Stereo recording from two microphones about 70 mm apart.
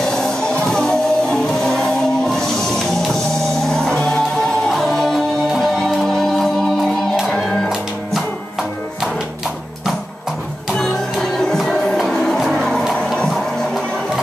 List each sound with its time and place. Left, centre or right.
0.0 s music: centre
10.7 s music: centre